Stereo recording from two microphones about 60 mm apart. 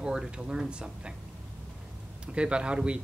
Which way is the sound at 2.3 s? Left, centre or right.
Centre.